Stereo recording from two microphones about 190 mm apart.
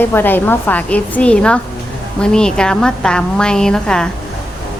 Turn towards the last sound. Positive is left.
turn(degrees=5)  # may be behind; listen again after turning